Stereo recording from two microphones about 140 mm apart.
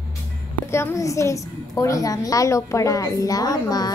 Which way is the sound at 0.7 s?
20° left (ahead or behind).